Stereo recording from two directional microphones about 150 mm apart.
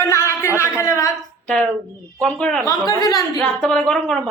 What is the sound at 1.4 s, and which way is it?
A woman's voice, 5° left (ahead or behind).